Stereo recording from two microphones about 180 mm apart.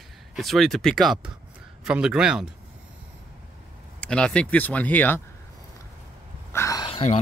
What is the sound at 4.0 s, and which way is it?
Speech, 5° left (ahead or behind).